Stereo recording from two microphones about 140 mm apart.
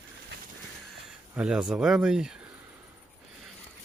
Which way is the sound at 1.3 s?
5° right (ahead or behind).